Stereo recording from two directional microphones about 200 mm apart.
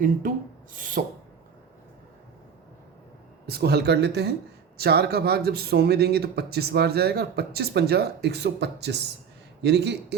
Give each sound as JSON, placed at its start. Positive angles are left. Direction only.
{"t": 0.0, "sound": "speech", "side_deg": -45}
{"t": 3.4, "sound": "speech", "side_deg": -55}